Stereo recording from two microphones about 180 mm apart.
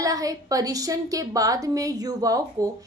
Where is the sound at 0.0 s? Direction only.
20° right (ahead or behind).